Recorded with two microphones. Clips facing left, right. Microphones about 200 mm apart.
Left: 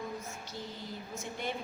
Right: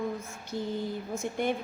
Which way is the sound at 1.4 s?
50° right (ahead or behind).